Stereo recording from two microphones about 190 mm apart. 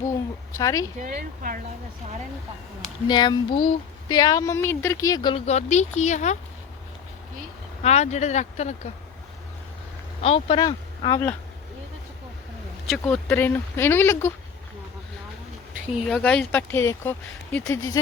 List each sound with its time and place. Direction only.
0.6 s a sound: 20° left (ahead or behind)
0.9 s speech: 45° right (ahead or behind)
3.1 s a sound: 25° left (ahead or behind)
4.1 s speech: 20° left (ahead or behind)
5.5 s speech: 35° left (ahead or behind)
7.8 s speech: 35° left (ahead or behind)
10.2 s speech: 30° left (ahead or behind)
12.9 s speech: 5° left (ahead or behind)
16.0 s speech: 5° left (ahead or behind)